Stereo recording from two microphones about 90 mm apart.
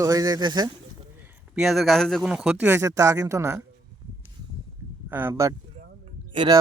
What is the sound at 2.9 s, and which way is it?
Speech, 40° right (ahead or behind).